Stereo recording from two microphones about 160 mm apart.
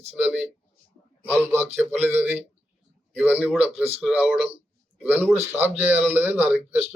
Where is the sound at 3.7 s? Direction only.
40° right (ahead or behind).